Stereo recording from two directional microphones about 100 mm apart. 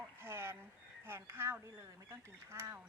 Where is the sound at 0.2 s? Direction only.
25° right (ahead or behind).